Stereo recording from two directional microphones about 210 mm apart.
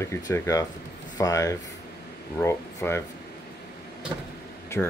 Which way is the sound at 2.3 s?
10° left (ahead or behind).